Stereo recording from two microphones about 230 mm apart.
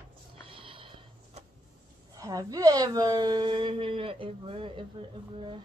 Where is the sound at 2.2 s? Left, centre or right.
Centre.